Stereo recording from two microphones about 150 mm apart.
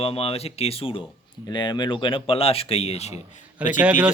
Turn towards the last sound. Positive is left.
turn(degrees=-10)  # may be behind; listen again after turning